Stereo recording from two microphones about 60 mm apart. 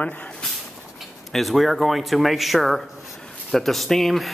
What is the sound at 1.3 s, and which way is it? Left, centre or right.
Speech, centre.